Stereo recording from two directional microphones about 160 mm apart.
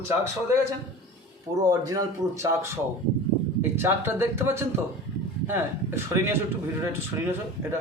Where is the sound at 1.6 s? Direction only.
20° right (ahead or behind).